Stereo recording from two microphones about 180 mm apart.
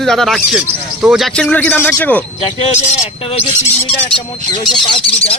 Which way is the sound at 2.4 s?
35° left (ahead or behind).